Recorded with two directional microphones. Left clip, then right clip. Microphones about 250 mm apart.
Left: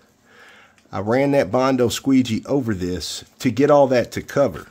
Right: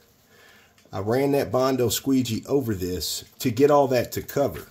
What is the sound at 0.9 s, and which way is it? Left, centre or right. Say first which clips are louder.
Speech: left 5 dB; left.